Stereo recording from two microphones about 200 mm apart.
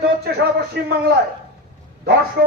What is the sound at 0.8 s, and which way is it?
Speech, 55° right (ahead or behind).